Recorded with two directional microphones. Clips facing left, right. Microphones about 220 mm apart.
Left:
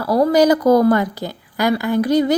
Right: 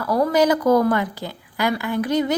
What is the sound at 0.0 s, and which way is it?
A woman's voice, 35° left (ahead or behind).